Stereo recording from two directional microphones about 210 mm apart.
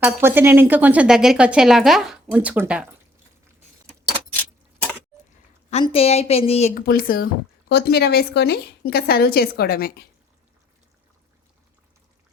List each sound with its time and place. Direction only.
0.0 s speech: 10° right (ahead or behind)
4.4 s keys jangling: 5° left (ahead or behind)
5.7 s a woman's voice: 25° left (ahead or behind); by 10.1 s 45° left (ahead or behind)